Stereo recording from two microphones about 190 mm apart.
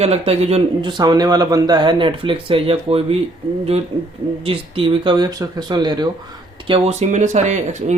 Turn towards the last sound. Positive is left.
turn(degrees=-40)  # may be behind; listen again after turning